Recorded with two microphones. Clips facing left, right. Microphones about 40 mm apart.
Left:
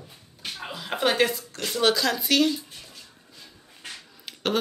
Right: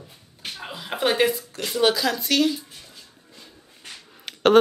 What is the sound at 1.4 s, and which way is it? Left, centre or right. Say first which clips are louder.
Speech: right 3 dB; centre.